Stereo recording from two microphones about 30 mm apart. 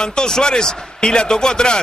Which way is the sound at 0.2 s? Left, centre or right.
Left.